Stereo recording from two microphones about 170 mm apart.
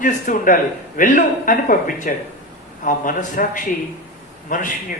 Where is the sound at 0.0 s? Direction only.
50° left (ahead or behind).